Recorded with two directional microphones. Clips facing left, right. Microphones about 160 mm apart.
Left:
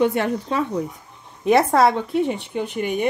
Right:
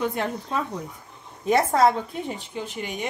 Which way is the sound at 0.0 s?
75° left (ahead or behind).